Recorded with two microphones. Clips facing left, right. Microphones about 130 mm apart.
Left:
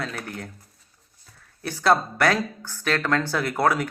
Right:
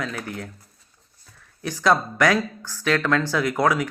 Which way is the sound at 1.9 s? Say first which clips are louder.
Right 1 dB; 50° left (ahead or behind).